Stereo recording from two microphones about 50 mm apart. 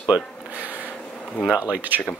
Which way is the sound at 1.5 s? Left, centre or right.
Right.